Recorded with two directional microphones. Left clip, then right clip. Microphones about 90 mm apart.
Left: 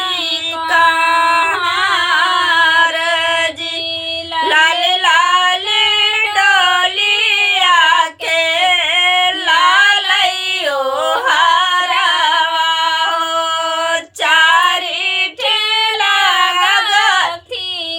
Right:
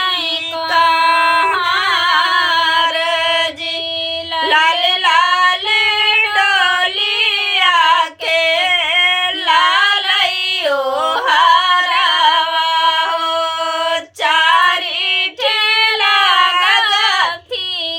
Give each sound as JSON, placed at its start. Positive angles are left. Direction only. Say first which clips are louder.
{"t": 1.5, "sound": "singing", "louder": "even", "side_deg": 25}
{"t": 4.4, "sound": "child singing", "louder": "left 1 dB", "side_deg": 20}
{"t": 6.1, "sound": "female singing", "louder": "left 1 dB", "side_deg": 20}
{"t": 11.0, "sound": "music", "louder": "even", "side_deg": 25}
{"t": 14.3, "sound": "female singing", "louder": "left 2 dB", "side_deg": 25}
{"t": 15.4, "sound": "female singing", "louder": "right 2 dB", "side_deg": -50}
{"t": 16.0, "sound": "female singing", "louder": "even", "side_deg": 20}
{"t": 16.9, "sound": "child singing", "louder": "left 2 dB", "side_deg": 20}